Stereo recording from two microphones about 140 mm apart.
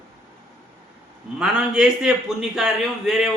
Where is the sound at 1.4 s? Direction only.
5° right (ahead or behind).